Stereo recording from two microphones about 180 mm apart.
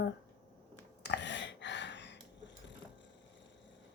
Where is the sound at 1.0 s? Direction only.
80° left.